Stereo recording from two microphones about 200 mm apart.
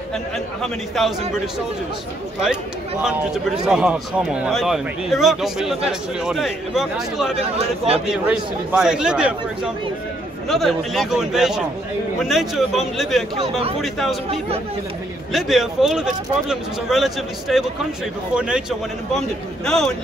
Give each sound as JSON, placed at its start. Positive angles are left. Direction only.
{"t": 0.1, "sound": "speech", "side_deg": 0}
{"t": 2.4, "sound": "speech", "side_deg": -5}
{"t": 7.4, "sound": "speech", "side_deg": -30}
{"t": 8.1, "sound": "speech", "side_deg": -5}
{"t": 10.5, "sound": "speech", "side_deg": 0}
{"t": 13.4, "sound": "speech", "side_deg": -30}
{"t": 13.7, "sound": "speech", "side_deg": 0}
{"t": 15.3, "sound": "speech", "side_deg": 0}